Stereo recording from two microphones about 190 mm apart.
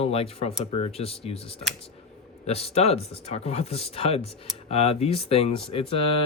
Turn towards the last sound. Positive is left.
turn(degrees=30)  # may be behind; listen again after turning